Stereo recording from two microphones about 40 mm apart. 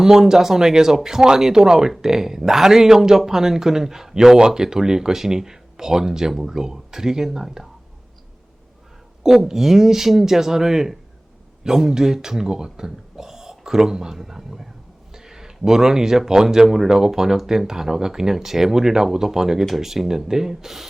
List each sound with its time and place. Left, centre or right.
0.0 s speech: centre
9.2 s speech: centre